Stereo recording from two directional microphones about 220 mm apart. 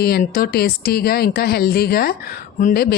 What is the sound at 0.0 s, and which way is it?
Speech, 40° left (ahead or behind).